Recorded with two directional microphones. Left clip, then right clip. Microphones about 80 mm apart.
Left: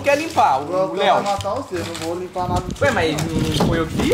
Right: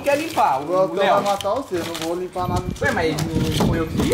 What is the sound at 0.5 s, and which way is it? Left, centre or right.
Speech, right.